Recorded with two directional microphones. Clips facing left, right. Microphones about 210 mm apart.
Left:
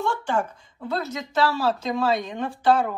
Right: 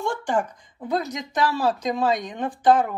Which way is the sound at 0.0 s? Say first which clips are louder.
Right 1 dB; 15° right (ahead or behind).